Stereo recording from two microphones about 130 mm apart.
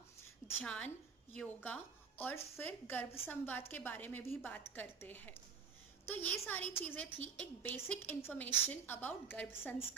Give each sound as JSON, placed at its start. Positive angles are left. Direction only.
{"t": 0.6, "sound": "a woman's voice", "side_deg": 10}